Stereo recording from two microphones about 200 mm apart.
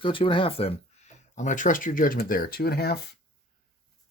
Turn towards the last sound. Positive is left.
turn(degrees=55)  # may be behind; listen again after turning